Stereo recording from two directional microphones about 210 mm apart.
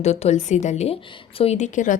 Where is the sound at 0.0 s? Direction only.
30° left (ahead or behind).